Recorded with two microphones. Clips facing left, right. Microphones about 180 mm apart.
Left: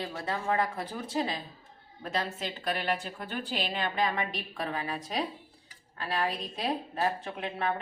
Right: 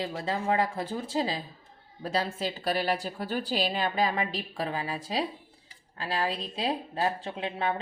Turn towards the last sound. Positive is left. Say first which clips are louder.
# right 2 dB
turn(degrees=-25)  # may be behind; listen again after turning